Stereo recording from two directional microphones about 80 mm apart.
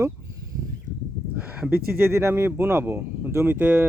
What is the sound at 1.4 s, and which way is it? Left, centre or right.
Speech, centre.